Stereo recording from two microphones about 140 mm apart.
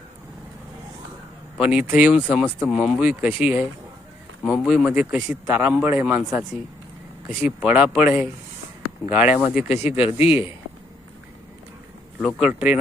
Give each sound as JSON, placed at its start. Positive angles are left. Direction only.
{"t": 1.5, "sound": "speech", "side_deg": -5}
{"t": 9.6, "sound": "speech", "side_deg": 50}
{"t": 12.2, "sound": "speech", "side_deg": -5}